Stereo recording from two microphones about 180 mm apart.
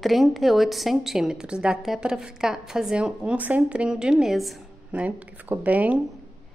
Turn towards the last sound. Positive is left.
turn(degrees=-10)  # may be behind; listen again after turning